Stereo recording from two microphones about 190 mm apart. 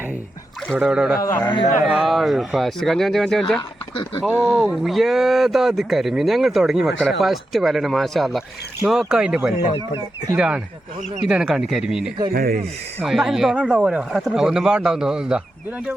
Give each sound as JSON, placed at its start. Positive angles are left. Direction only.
{"t": 0.7, "sound": "speech", "side_deg": 0}
{"t": 1.2, "sound": "speech", "side_deg": 15}
{"t": 1.8, "sound": "speech", "side_deg": 0}
{"t": 12.3, "sound": "speech", "side_deg": -55}
{"t": 13.0, "sound": "speech", "side_deg": -5}